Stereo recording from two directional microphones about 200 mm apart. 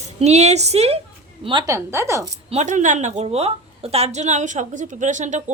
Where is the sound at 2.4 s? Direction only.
35° right (ahead or behind).